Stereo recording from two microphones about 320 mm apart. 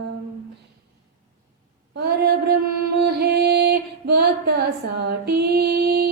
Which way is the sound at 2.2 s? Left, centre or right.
Right.